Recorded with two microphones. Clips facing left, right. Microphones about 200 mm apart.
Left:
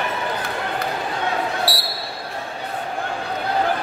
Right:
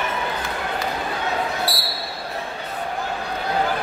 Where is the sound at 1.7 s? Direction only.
30° left (ahead or behind).